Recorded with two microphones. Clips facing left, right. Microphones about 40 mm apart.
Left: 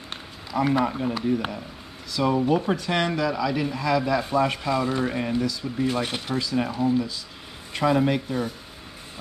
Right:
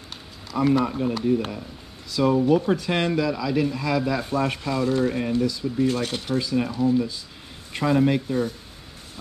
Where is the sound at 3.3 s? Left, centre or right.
Centre.